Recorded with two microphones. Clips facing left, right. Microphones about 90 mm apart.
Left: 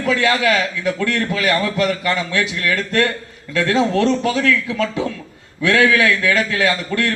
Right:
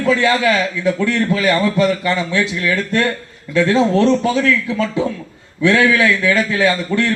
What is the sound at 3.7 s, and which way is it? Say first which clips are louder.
A man's voice: right 2 dB; 30° right (ahead or behind).